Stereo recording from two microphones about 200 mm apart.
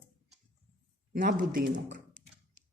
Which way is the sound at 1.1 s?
40° right (ahead or behind).